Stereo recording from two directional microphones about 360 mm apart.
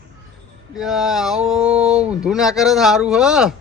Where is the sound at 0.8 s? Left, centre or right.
Centre.